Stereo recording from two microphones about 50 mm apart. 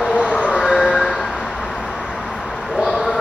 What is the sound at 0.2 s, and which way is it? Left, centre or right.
Train, left.